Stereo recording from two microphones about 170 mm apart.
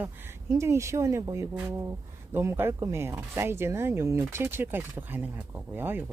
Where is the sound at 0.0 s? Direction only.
15° right (ahead or behind).